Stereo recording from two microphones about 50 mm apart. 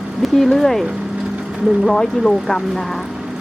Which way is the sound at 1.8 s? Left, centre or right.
Centre.